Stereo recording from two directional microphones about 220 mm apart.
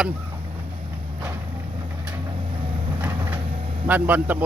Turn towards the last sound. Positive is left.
turn(degrees=-10)  # may be behind; listen again after turning